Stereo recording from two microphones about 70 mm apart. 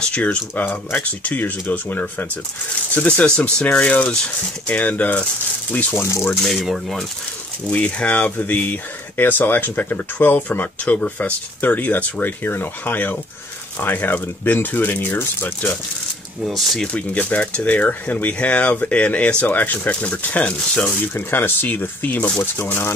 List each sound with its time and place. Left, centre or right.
0.1 s speech: centre
6.0 s speech: left
6.4 s speech: centre
7.7 s speech: centre
16.4 s speech: centre
16.8 s speech: centre